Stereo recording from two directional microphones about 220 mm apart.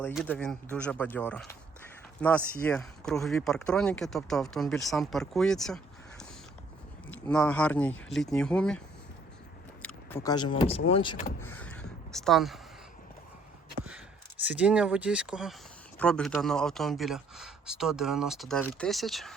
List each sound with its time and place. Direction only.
0.1 s speech: centre (ahead or behind)
10.2 s speech: 20° left (ahead or behind)
11.4 s a sound: 5° left (ahead or behind)
14.4 s speech: 5° right (ahead or behind)